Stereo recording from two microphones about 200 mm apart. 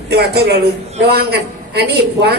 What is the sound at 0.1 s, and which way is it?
A man's voice, 55° right (ahead or behind).